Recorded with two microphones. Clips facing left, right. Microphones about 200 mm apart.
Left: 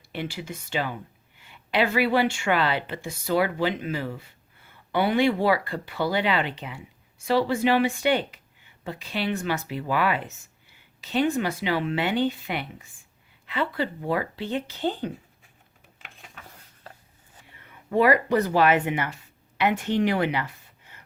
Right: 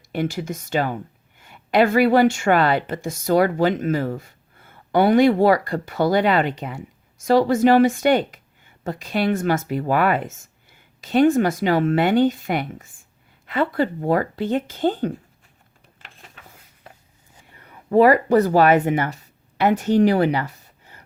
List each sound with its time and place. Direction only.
0.1 s speech: 45° right (ahead or behind)
17.5 s speech: 40° right (ahead or behind)